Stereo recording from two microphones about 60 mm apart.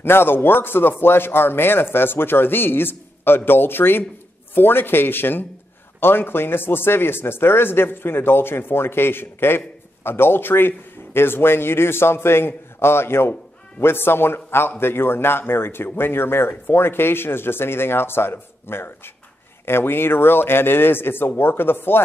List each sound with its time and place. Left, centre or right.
0.0 s a man's voice: left